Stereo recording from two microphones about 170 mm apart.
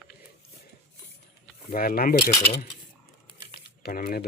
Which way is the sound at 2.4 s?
20° left (ahead or behind).